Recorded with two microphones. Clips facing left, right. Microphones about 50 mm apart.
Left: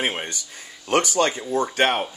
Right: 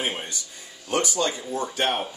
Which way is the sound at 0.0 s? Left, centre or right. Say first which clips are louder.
Left 3 dB; left.